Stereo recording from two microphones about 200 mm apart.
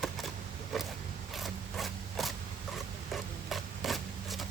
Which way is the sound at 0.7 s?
Centre (ahead or behind).